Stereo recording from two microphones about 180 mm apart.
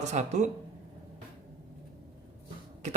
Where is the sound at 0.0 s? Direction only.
40° right (ahead or behind).